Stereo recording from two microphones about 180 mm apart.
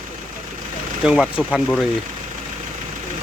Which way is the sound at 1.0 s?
5° right (ahead or behind).